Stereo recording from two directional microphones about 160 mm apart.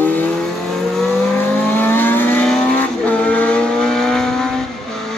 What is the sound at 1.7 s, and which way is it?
Vehicle, 15° left (ahead or behind).